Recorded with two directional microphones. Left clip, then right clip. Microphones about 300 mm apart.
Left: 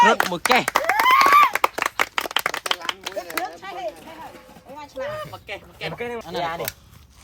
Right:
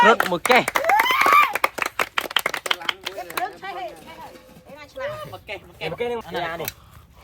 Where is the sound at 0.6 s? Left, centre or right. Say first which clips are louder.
Even; centre.